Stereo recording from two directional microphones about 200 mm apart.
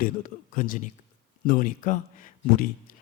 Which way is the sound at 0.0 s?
40° left (ahead or behind).